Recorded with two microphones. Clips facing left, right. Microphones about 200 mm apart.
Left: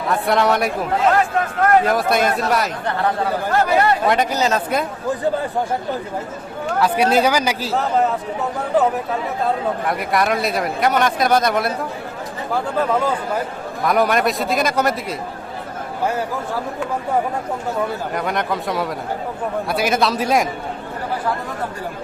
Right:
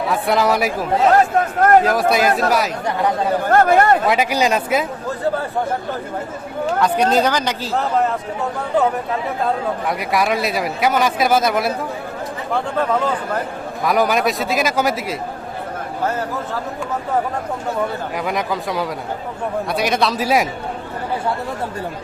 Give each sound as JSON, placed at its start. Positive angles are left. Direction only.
{"t": 0.1, "sound": "speech", "side_deg": 0}
{"t": 3.5, "sound": "speech", "side_deg": -50}
{"t": 4.0, "sound": "speech", "side_deg": -5}
{"t": 6.7, "sound": "speech", "side_deg": 5}
{"t": 9.8, "sound": "speech", "side_deg": 0}
{"t": 12.7, "sound": "speech", "side_deg": 10}
{"t": 18.1, "sound": "speech", "side_deg": 0}